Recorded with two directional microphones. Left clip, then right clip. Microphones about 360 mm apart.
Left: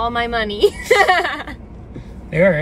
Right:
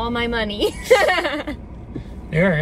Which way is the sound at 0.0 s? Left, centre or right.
Centre.